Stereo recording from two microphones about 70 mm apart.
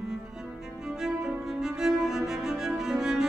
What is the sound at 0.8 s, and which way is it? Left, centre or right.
Cello, centre.